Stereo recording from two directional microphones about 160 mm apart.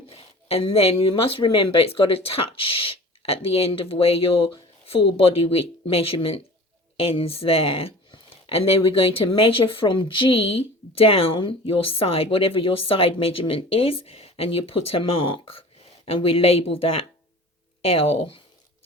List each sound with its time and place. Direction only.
0.1 s speech: 40° left (ahead or behind)